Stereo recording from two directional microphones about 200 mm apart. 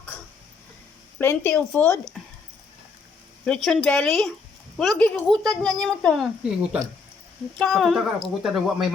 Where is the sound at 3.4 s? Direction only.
5° left (ahead or behind).